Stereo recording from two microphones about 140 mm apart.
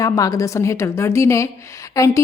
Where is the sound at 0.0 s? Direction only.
25° left (ahead or behind).